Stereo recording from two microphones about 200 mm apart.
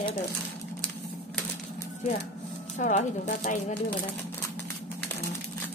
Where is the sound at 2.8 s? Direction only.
35° left (ahead or behind).